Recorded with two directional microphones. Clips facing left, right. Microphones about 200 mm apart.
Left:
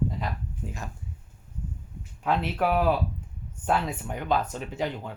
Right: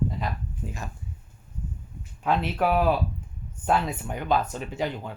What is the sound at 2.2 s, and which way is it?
Speech, 20° right (ahead or behind).